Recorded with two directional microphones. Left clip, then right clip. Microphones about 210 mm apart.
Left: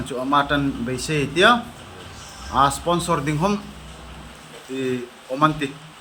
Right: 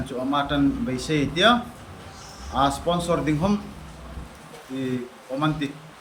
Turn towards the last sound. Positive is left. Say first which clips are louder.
# left 6 dB
turn(degrees=25)  # may be behind; listen again after turning